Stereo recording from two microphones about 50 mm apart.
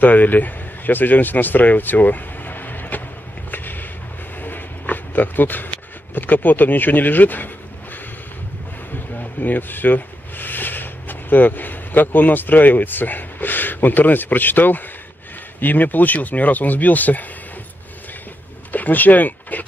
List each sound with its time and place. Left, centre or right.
0.0 s speech: left
3.5 s a sound: left
8.9 s speech: left
18.7 s speech: left